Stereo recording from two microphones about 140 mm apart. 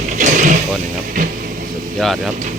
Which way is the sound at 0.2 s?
60° right (ahead or behind).